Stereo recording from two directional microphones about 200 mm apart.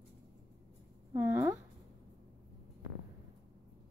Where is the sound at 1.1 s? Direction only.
15° right (ahead or behind).